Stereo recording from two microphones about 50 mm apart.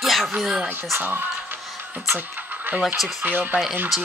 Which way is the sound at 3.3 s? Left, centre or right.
Right.